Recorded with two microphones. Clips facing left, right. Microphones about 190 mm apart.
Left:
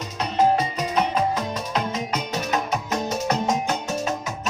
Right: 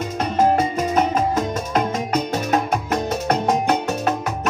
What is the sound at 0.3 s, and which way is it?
Music, 50° right (ahead or behind).